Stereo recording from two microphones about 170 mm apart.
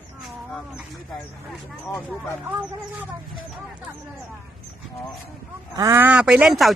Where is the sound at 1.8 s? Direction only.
10° left (ahead or behind).